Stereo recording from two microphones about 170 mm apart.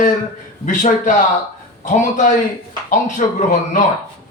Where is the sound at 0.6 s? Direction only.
45° left (ahead or behind).